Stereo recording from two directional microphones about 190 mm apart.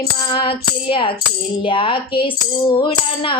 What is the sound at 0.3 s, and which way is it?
Female singing, 30° left (ahead or behind).